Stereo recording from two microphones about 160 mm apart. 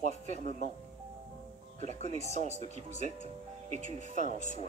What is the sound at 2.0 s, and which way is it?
Speech, 45° left (ahead or behind).